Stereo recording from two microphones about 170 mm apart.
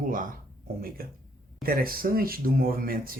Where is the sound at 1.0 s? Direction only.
60° right (ahead or behind).